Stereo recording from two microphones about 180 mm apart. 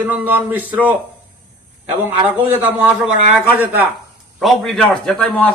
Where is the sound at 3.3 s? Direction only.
10° right (ahead or behind).